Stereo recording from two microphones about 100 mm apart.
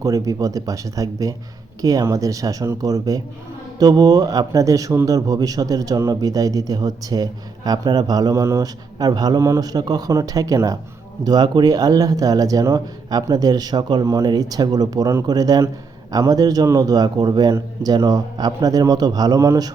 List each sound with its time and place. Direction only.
0.0 s a man's voice: 35° right (ahead or behind)